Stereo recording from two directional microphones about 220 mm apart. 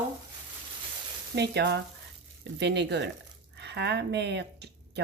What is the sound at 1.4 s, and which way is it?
Speech, 50° right (ahead or behind).